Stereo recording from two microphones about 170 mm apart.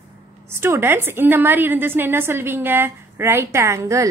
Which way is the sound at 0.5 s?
15° right (ahead or behind).